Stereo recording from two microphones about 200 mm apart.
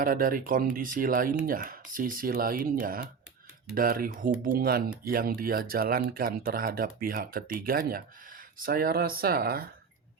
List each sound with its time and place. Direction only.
0.0 s speech: 45° right (ahead or behind)